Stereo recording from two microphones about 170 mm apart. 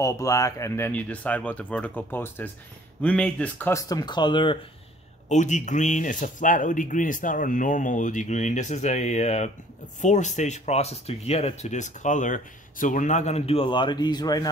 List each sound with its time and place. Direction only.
0.0 s speech: 20° left (ahead or behind)
5.3 s speech: 45° left (ahead or behind); by 14.5 s 20° left (ahead or behind)